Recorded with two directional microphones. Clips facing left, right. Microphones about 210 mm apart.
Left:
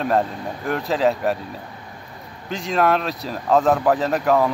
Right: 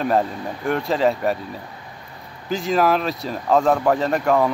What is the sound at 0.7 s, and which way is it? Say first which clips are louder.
Speech: right 1 dB; centre (ahead or behind).